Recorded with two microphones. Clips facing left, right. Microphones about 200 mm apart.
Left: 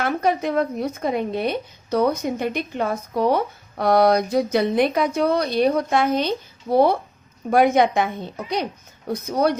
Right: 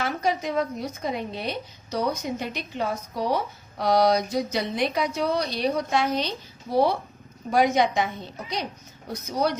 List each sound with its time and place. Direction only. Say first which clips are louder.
0.0 s speech: left 5 dB; 55° left (ahead or behind)